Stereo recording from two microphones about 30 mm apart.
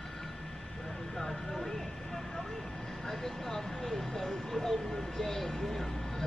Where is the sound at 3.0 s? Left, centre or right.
Centre.